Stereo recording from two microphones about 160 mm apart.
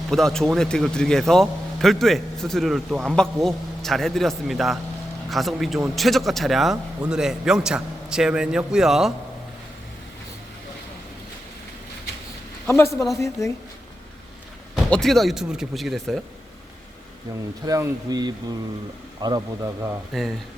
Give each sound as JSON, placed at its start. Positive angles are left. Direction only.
{"t": 0.1, "sound": "a man's voice", "side_deg": 0}
{"t": 12.6, "sound": "a woman's voice", "side_deg": 15}
{"t": 14.8, "sound": "a man's voice", "side_deg": 5}
{"t": 17.7, "sound": "speech", "side_deg": -20}